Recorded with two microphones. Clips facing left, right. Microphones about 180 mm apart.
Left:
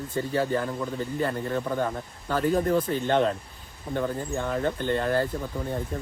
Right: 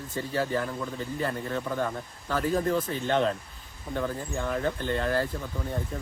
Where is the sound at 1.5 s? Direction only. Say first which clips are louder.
Left 2 dB; 25° left (ahead or behind).